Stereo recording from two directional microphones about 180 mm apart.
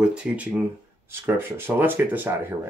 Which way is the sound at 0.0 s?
5° right (ahead or behind).